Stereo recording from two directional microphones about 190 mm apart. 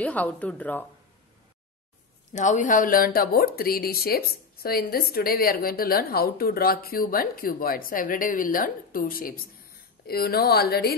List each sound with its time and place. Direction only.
0.0 s speech: 10° left (ahead or behind)
2.3 s speech: 40° left (ahead or behind)